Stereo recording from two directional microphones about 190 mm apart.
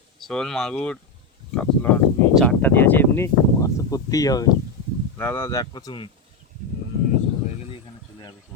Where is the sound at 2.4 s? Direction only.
10° left (ahead or behind).